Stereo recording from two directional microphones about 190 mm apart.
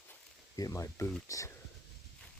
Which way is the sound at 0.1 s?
15° left (ahead or behind).